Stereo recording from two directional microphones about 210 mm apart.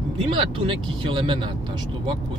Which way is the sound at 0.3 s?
25° right (ahead or behind).